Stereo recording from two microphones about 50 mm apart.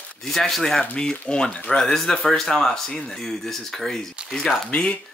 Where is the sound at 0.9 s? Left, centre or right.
Centre.